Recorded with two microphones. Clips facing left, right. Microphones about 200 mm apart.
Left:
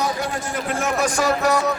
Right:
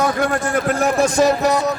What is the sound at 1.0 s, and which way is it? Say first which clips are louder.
Speech: right 4 dB; 20° right (ahead or behind).